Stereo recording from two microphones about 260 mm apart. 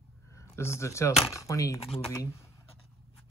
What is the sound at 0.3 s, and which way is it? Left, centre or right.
Speech, centre.